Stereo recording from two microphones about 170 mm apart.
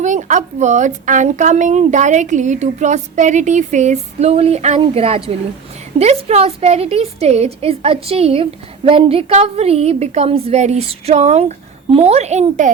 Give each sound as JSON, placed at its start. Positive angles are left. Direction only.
{"t": 0.0, "sound": "a woman's voice", "side_deg": -45}